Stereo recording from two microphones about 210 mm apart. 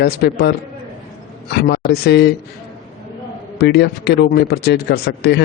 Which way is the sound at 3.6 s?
50° left (ahead or behind).